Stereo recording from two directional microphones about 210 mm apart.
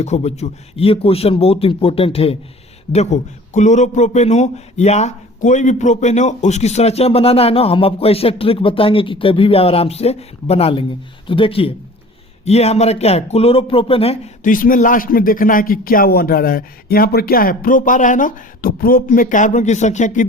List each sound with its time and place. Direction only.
0.0 s a man's voice: 30° left (ahead or behind)
14.5 s a man's voice: 40° left (ahead or behind)